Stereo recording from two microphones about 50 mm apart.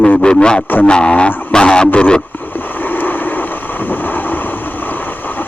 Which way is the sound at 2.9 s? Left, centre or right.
Left.